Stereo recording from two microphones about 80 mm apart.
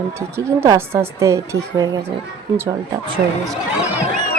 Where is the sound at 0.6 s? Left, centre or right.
Right.